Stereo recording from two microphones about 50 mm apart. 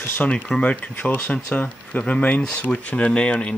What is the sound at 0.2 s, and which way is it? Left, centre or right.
Speech, left.